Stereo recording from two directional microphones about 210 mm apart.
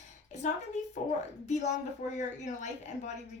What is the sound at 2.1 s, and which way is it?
Speech, 35° left (ahead or behind).